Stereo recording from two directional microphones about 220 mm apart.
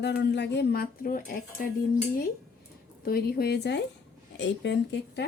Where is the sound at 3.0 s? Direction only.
45° left (ahead or behind).